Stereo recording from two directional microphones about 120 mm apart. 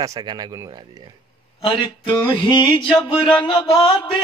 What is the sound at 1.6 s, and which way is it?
Music, 45° left (ahead or behind).